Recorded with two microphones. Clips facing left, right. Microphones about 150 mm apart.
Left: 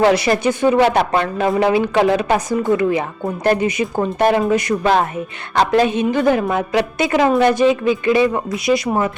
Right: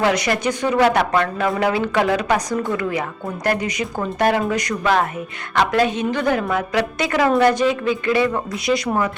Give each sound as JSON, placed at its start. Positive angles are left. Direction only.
{"t": 0.0, "sound": "speech", "side_deg": 30}